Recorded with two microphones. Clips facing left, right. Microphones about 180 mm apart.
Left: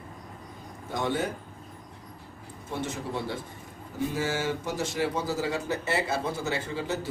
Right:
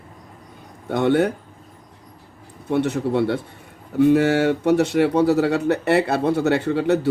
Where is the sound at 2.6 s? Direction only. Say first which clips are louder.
Right 13 dB; 65° right (ahead or behind).